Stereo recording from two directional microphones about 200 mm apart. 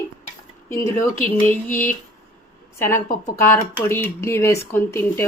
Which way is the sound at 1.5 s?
10° left (ahead or behind).